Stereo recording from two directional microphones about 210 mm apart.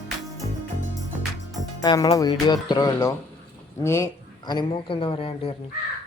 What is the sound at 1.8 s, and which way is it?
A man's voice, 15° left (ahead or behind).